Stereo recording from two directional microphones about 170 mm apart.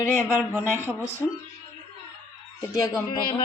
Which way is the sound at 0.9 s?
15° left (ahead or behind).